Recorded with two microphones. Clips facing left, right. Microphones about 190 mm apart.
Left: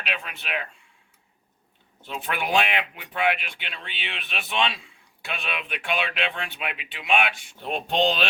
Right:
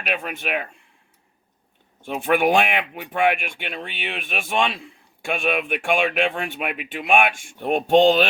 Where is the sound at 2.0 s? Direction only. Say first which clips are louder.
Right 10 dB; 50° right (ahead or behind).